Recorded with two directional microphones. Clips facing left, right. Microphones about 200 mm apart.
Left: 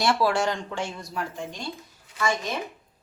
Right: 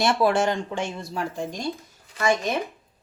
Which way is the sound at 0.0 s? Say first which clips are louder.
Right 2 dB; 20° right (ahead or behind).